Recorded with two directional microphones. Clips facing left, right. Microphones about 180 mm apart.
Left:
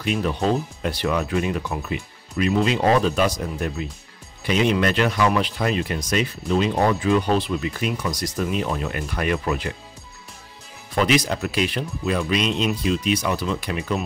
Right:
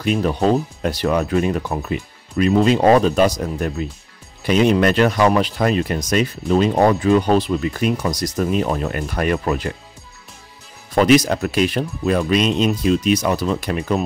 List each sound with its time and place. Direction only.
0.0 s speech: 40° right (ahead or behind)
11.0 s speech: 45° right (ahead or behind)